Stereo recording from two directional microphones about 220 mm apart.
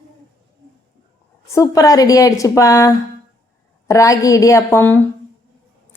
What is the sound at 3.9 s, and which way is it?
A woman's voice, 15° left (ahead or behind).